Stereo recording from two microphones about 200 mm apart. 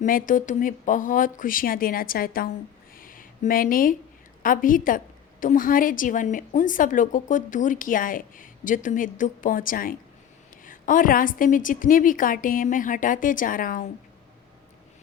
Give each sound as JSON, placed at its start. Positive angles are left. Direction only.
{"t": 0.0, "sound": "a woman's voice", "side_deg": 45}
{"t": 2.9, "sound": "a sound", "side_deg": 45}
{"t": 4.4, "sound": "a woman's voice", "side_deg": 45}